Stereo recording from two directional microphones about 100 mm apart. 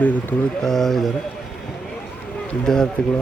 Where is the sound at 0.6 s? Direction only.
5° left (ahead or behind).